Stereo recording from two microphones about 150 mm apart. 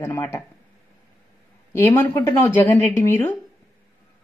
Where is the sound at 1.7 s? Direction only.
15° left (ahead or behind).